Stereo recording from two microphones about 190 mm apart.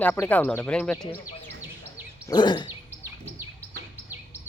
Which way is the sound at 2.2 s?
20° left (ahead or behind).